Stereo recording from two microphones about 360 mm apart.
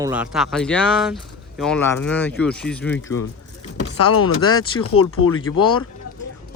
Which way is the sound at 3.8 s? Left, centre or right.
Left.